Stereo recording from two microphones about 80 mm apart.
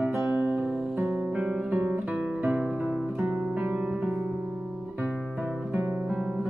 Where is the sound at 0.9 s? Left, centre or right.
Right.